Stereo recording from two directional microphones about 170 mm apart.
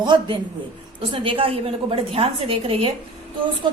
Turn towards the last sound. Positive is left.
turn(degrees=-30)  # may be behind; listen again after turning